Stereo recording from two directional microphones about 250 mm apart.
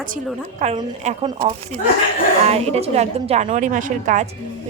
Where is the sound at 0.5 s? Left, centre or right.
Right.